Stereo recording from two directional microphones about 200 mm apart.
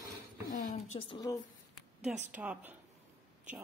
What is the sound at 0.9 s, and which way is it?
Speech, 20° left (ahead or behind).